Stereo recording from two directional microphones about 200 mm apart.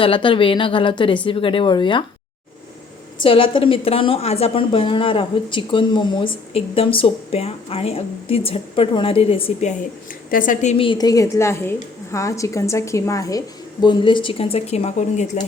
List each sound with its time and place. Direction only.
0.0 s a woman's voice: 25° left (ahead or behind)
3.2 s a woman's voice: 25° left (ahead or behind)
10.3 s a woman's voice: 40° left (ahead or behind)